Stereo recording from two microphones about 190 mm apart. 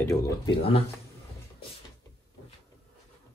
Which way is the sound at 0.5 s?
30° left (ahead or behind).